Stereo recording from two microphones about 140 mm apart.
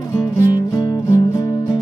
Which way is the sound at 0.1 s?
25° left (ahead or behind).